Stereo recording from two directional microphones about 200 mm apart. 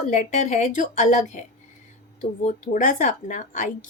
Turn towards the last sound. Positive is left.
turn(degrees=40)  # may be behind; listen again after turning